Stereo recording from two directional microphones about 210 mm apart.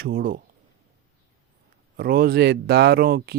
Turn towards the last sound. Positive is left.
turn(degrees=-45)  # may be behind; listen again after turning